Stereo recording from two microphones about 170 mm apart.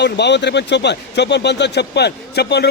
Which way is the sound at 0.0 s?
90° left.